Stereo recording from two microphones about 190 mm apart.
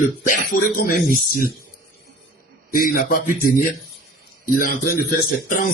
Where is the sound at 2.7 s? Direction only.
50° left (ahead or behind).